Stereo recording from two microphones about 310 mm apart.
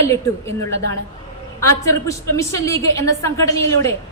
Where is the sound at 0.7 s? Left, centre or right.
Right.